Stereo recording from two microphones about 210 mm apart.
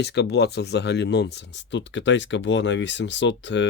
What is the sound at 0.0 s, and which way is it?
Speech, 55° left (ahead or behind).